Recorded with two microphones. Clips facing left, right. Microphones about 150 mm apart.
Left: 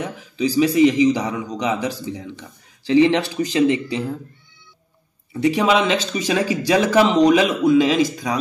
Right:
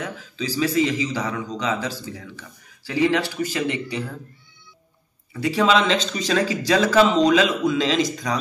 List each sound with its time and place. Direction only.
0.0 s a man's voice: 15° left (ahead or behind)
5.4 s a man's voice: 15° left (ahead or behind)